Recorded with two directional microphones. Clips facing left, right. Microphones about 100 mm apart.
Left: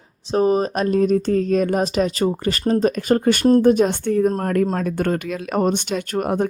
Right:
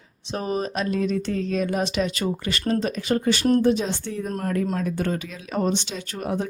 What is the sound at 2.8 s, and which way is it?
Speech, 45° left (ahead or behind).